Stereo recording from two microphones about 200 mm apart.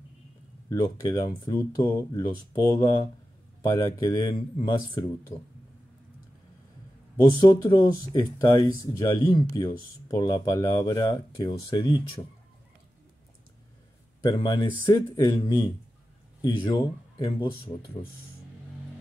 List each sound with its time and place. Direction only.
0.7 s speech: 20° left (ahead or behind)
7.3 s speech: 20° left (ahead or behind)
14.2 s speech: 20° left (ahead or behind)